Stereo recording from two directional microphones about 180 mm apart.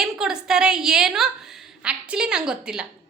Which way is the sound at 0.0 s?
5° right (ahead or behind).